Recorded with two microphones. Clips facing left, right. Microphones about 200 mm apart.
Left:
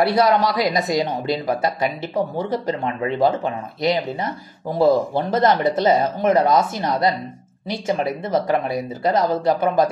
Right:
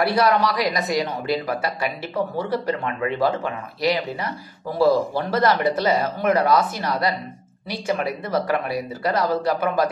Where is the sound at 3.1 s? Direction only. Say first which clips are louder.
Left 5 dB; 25° left (ahead or behind).